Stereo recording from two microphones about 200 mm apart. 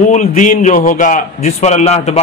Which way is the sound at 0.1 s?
40° left (ahead or behind).